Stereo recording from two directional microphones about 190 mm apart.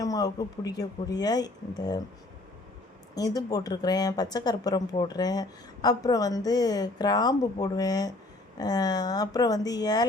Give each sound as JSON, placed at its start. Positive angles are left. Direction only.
{"t": 0.0, "sound": "speech", "side_deg": 20}
{"t": 3.2, "sound": "speech", "side_deg": 20}